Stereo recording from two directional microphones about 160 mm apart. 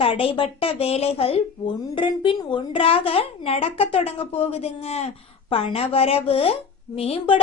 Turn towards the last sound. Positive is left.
turn(degrees=35)  # may be behind; listen again after turning